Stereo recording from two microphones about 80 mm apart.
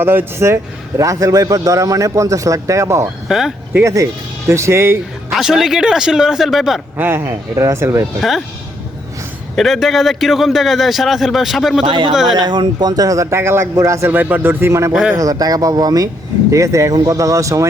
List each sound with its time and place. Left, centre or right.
0.0 s a man's voice: right
3.2 s speech: centre
3.8 s speech: right
5.3 s a man's voice: centre
6.9 s speech: right
9.6 s a man's voice: centre
11.9 s speech: right
12.4 s a man's voice: right
14.1 s speech: right
14.7 s speech: right
15.1 s a man's voice: right
16.5 s speech: right